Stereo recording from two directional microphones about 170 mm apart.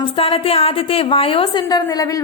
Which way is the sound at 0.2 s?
30° left (ahead or behind).